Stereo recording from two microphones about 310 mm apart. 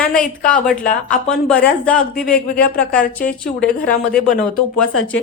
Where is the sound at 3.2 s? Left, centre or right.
Left.